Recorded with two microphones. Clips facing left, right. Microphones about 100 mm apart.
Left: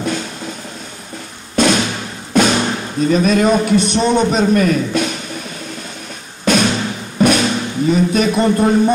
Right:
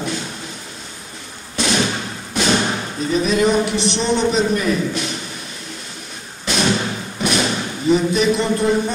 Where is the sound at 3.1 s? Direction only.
50° left (ahead or behind).